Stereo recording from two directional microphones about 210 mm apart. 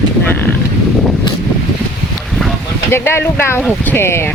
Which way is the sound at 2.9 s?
10° left (ahead or behind).